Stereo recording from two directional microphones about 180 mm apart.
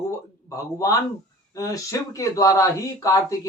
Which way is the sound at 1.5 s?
20° left (ahead or behind).